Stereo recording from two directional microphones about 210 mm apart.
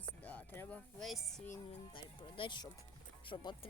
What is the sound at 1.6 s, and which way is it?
Speech, 25° left (ahead or behind).